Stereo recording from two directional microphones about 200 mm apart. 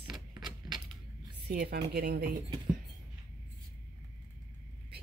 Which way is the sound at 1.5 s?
50° right (ahead or behind).